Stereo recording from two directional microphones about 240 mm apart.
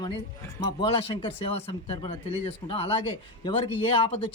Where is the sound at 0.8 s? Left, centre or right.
Left.